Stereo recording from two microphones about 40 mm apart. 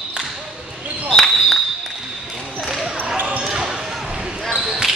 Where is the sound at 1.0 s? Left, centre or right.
Centre.